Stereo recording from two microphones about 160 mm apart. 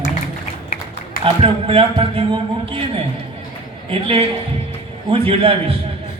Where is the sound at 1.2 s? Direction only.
35° right (ahead or behind).